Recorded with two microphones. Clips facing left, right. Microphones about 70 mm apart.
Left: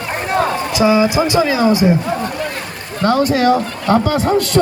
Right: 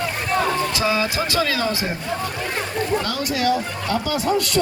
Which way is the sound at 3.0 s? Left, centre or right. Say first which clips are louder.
Left 9 dB; left.